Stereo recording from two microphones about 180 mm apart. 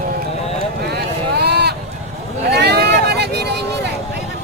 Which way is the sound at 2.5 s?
65° right (ahead or behind).